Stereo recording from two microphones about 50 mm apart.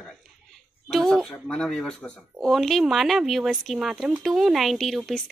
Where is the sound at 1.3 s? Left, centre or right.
Centre.